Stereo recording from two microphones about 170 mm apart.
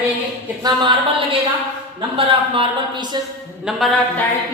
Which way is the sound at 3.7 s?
5° right (ahead or behind).